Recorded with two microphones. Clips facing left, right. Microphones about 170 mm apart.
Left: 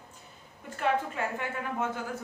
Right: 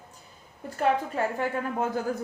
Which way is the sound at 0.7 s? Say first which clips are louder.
Right 4 dB; 40° right (ahead or behind).